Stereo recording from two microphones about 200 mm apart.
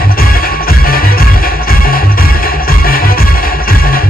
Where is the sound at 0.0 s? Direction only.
45° left (ahead or behind).